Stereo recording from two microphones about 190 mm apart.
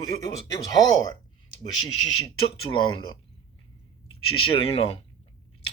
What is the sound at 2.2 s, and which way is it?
Speech, 25° left (ahead or behind).